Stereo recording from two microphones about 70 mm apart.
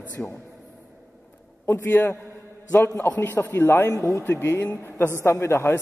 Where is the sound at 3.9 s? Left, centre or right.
Left.